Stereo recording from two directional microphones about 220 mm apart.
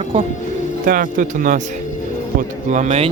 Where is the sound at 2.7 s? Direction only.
30° right (ahead or behind).